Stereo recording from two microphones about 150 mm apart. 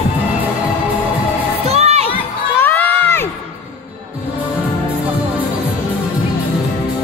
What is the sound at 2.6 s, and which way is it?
Crowd, 15° left (ahead or behind).